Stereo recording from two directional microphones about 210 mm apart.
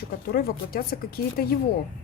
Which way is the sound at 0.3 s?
45° left (ahead or behind).